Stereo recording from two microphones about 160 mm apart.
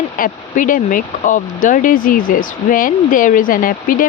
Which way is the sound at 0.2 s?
55° left (ahead or behind).